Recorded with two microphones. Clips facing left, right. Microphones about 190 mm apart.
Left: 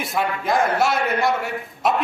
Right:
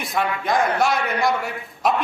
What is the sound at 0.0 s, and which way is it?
A man's voice, 5° left (ahead or behind).